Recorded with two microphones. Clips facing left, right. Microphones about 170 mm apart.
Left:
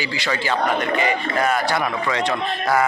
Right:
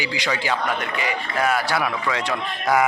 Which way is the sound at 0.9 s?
50° left (ahead or behind).